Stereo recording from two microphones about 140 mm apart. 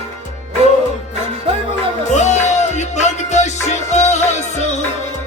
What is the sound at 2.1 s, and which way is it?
Music, 55° left (ahead or behind).